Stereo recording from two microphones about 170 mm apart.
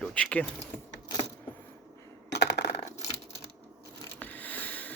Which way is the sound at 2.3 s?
85° left.